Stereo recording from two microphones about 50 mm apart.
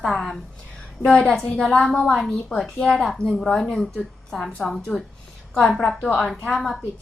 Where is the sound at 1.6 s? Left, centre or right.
Centre.